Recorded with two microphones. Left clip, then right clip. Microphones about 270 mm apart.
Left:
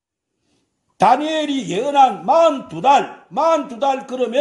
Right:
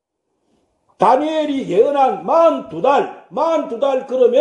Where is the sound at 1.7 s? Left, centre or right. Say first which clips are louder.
Even; left.